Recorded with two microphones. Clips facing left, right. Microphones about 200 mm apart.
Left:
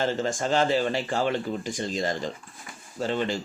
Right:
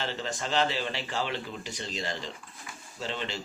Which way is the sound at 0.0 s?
45° left (ahead or behind).